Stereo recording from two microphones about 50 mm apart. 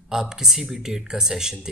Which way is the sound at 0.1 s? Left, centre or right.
Centre.